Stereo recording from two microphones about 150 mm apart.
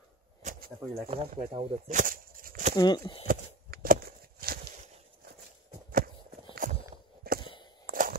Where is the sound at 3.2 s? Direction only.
70° right (ahead or behind).